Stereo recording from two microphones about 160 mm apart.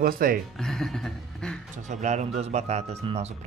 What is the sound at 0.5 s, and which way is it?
Speech, 5° left (ahead or behind).